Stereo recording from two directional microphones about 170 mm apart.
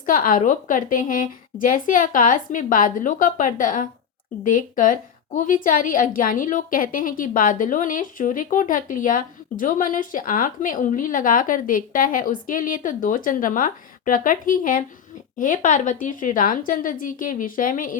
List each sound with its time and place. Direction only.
0.0 s a woman's voice: 55° left (ahead or behind)